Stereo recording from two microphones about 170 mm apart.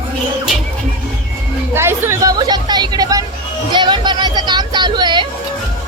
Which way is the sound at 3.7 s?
25° right (ahead or behind).